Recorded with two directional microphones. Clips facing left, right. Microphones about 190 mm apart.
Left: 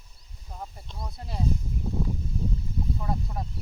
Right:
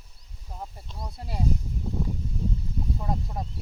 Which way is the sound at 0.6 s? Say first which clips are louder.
Even; 5° right (ahead or behind).